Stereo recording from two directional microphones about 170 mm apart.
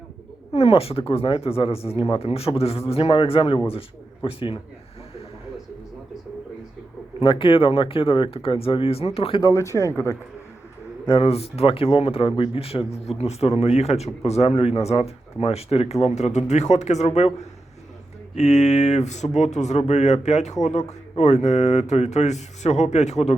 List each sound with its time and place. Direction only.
0.5 s speech: 35° left (ahead or behind)
7.2 s speech: 30° left (ahead or behind)
9.4 s speech: 15° left (ahead or behind)
11.0 s speech: 30° left (ahead or behind)
18.3 s speech: 40° left (ahead or behind)